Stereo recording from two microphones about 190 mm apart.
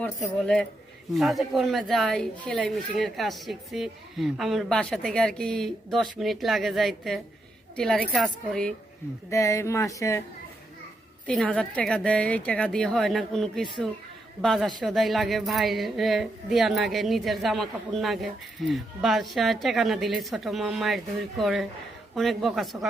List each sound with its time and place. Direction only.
0.0 s a woman's voice: 5° left (ahead or behind)
9.3 s speech: 15° left (ahead or behind)
11.3 s a woman's voice: 5° left (ahead or behind)